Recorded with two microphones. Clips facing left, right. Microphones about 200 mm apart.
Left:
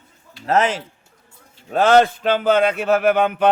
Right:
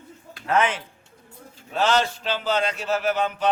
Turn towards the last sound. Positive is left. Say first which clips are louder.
# left 7 dB
turn(degrees=60)  # may be behind; listen again after turning